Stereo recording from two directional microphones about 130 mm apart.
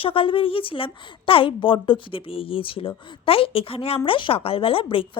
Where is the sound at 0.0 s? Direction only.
45° left (ahead or behind).